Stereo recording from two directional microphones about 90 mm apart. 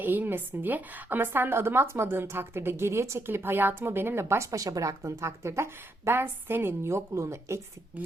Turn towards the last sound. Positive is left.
turn(degrees=-30)  # may be behind; listen again after turning